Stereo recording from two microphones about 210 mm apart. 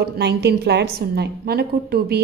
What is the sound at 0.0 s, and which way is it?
A woman's voice, 50° right (ahead or behind).